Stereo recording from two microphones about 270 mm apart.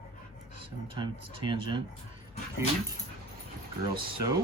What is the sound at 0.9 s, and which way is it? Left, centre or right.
Speech, centre.